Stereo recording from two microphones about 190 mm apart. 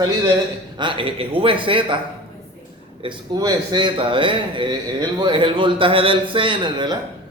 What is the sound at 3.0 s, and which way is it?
A man's voice, 25° right (ahead or behind).